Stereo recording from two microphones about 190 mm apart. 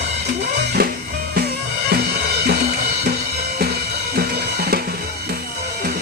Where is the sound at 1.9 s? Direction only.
60° right (ahead or behind).